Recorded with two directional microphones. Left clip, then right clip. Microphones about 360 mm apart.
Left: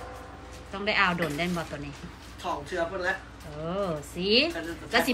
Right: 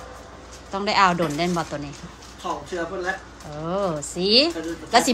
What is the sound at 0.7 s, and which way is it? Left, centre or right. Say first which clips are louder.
Speech: right 6 dB; centre.